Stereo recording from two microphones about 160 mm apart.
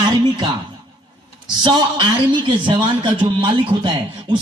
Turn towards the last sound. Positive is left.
turn(degrees=-30)  # may be behind; listen again after turning